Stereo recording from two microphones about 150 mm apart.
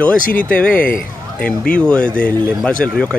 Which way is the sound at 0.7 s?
70° left (ahead or behind).